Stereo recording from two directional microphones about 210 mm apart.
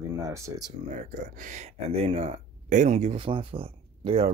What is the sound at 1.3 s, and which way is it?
Speech, 35° right (ahead or behind).